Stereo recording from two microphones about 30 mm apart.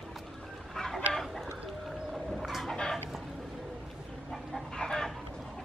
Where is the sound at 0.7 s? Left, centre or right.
Centre.